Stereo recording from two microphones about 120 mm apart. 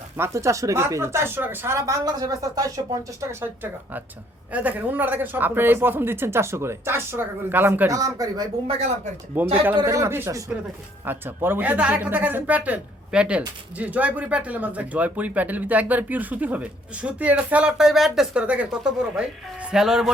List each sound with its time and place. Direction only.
0.2 s speech: 25° right (ahead or behind)
2.0 s speech: 30° right (ahead or behind)
3.4 s speech: 15° right (ahead or behind)
9.3 s speech: 15° right (ahead or behind)